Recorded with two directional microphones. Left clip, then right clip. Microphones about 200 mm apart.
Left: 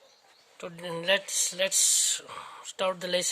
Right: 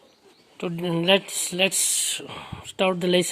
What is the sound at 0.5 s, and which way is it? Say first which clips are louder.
Speech: right 8 dB; 10° left (ahead or behind).